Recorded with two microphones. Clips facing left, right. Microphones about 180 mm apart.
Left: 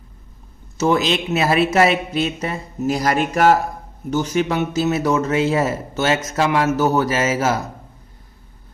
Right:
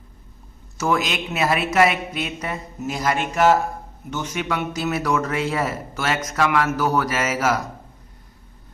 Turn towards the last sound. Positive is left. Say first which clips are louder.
# left 3 dB
turn(degrees=25)  # may be behind; listen again after turning